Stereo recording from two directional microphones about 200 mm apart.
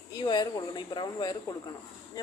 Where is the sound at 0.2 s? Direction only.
20° left (ahead or behind).